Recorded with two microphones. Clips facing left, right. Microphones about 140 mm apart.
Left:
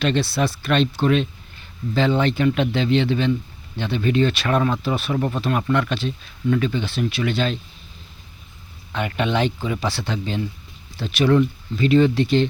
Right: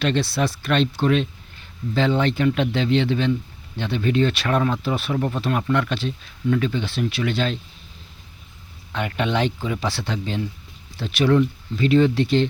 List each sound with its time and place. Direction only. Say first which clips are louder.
0.0 s speech: left 1 dB; 5° left (ahead or behind)
8.9 s speech: left 1 dB; 5° left (ahead or behind)